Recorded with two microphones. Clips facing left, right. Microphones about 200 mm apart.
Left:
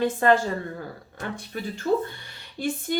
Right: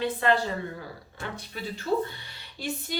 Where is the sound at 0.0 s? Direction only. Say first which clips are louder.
Left 5 dB; 45° left (ahead or behind).